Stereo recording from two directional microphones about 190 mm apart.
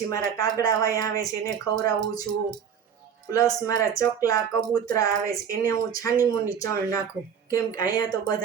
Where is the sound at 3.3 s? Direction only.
20° left (ahead or behind).